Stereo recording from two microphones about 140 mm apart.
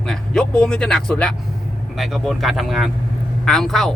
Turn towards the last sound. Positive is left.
turn(degrees=0)  # may be behind; listen again after turning